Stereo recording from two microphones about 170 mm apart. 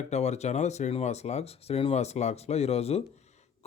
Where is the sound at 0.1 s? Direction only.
40° left (ahead or behind).